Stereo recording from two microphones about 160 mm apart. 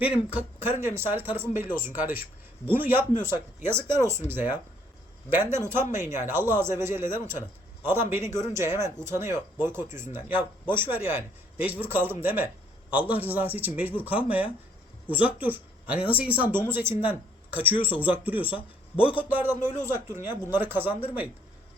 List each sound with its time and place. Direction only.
0.3 s speech: 15° right (ahead or behind)
2.0 s speech: 65° left (ahead or behind)
2.6 s speech: 10° right (ahead or behind)